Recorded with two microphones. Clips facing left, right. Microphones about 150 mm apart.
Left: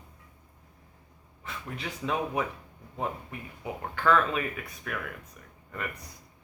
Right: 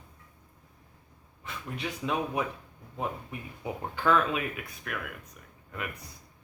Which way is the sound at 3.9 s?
15° right (ahead or behind).